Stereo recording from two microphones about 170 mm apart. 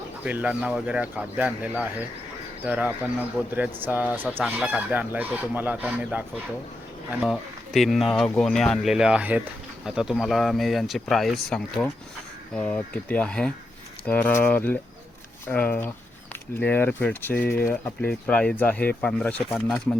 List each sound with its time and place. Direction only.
0.3 s chicken: 10° right (ahead or behind)
7.2 s speech: centre (ahead or behind)
19.5 s speech: centre (ahead or behind)